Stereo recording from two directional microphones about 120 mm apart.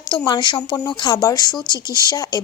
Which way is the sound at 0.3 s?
40° left (ahead or behind).